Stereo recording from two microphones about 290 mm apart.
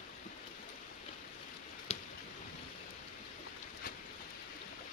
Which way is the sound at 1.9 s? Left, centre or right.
Left.